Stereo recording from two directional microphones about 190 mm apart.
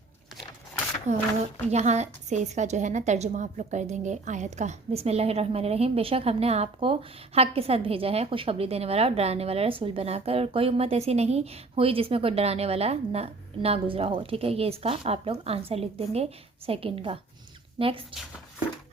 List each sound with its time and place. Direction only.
1.1 s a woman's voice: 35° right (ahead or behind)